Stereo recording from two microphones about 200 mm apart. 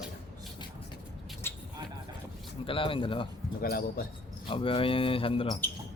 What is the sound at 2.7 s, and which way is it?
Speech, 25° left (ahead or behind).